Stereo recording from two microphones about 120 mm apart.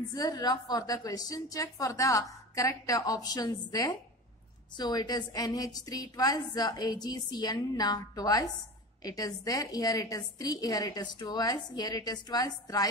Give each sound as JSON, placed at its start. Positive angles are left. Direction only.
{"t": 0.1, "sound": "a woman's voice", "side_deg": 35}